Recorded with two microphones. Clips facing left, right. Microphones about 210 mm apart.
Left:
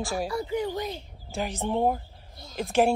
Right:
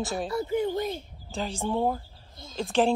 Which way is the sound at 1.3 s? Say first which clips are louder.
Left 1 dB; 15° left (ahead or behind).